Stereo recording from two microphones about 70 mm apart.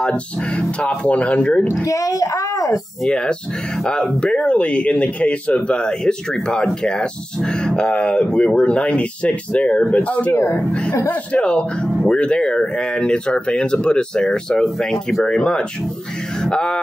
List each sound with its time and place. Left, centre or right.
0.0 s speech: centre
1.7 s a child's voice: left
3.0 s speech: centre
10.3 s a child's voice: left
11.4 s speech: centre